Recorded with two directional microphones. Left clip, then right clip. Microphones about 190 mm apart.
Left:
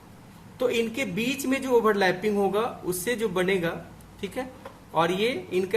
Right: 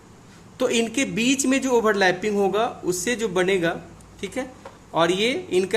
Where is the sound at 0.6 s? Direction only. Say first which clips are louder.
Right 3 dB; 30° right (ahead or behind).